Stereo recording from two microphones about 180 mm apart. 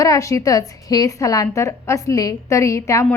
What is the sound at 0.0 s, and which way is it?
A woman's voice, 20° left (ahead or behind).